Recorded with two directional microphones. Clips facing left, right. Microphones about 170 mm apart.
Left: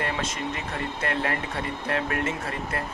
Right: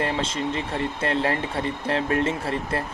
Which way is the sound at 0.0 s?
30° right (ahead or behind).